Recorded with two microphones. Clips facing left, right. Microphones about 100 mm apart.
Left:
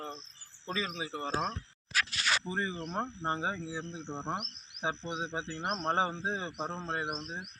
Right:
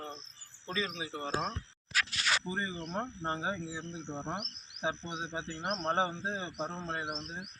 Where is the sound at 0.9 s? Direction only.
30° left (ahead or behind).